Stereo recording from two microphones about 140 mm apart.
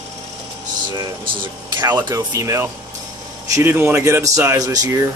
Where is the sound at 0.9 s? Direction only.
30° right (ahead or behind).